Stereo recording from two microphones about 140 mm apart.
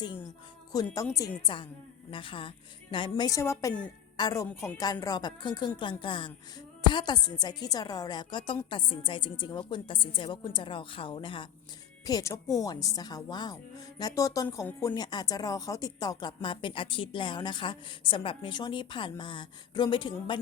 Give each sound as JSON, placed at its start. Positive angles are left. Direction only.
{"t": 0.7, "sound": "a woman's voice", "side_deg": 30}
{"t": 12.0, "sound": "a woman's voice", "side_deg": 25}